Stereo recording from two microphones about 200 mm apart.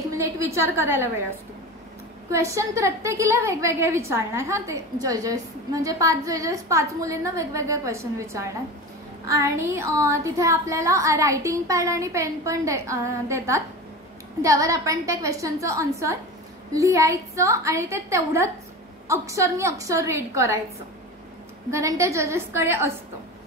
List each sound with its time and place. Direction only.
0.1 s a woman's voice: 15° right (ahead or behind)
2.3 s a woman's voice: 15° right (ahead or behind)
21.6 s a woman's voice: 15° right (ahead or behind)